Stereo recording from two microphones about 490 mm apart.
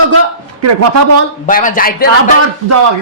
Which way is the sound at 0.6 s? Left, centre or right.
Right.